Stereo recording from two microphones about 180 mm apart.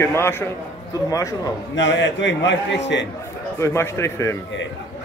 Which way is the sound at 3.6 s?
15° left (ahead or behind).